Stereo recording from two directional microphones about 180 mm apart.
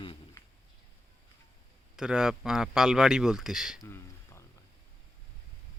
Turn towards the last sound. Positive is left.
turn(degrees=15)  # may be behind; listen again after turning